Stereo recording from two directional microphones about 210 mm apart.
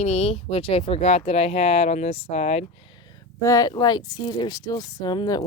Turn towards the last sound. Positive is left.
turn(degrees=20)  # may be behind; listen again after turning